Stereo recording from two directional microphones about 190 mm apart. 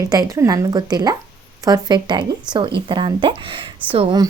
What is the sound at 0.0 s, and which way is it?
A woman's voice, 20° right (ahead or behind).